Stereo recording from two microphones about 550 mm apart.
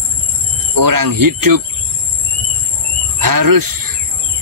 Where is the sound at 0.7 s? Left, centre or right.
Right.